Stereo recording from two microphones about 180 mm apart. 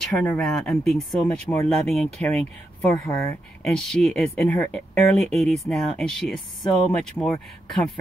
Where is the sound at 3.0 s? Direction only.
15° left (ahead or behind).